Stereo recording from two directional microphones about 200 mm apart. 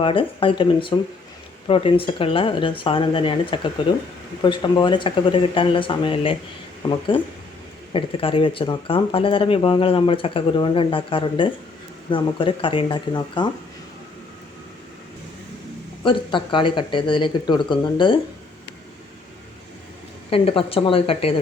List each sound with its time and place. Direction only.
0.0 s speech: 25° left (ahead or behind)
16.0 s speech: 25° left (ahead or behind)
20.3 s speech: 25° left (ahead or behind)